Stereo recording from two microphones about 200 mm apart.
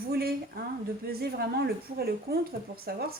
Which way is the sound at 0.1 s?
50° right (ahead or behind).